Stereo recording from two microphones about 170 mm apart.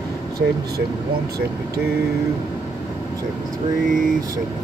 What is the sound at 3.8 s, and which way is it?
Speech, 50° right (ahead or behind).